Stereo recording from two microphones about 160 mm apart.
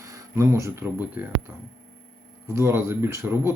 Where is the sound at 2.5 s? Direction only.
15° right (ahead or behind).